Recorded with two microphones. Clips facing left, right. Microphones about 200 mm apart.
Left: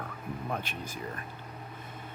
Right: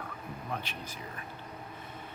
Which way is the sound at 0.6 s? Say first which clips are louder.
Left 3 dB; 50° left (ahead or behind).